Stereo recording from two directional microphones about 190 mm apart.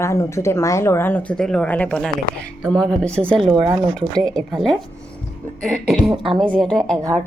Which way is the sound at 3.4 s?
25° right (ahead or behind).